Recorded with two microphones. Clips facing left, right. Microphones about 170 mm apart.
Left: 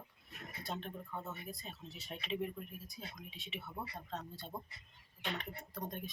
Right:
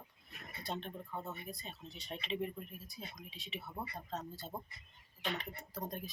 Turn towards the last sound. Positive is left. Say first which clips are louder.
# right 1 dB
turn(degrees=0)  # may be behind; listen again after turning